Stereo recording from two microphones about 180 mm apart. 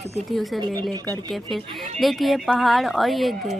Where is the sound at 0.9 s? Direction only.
25° right (ahead or behind).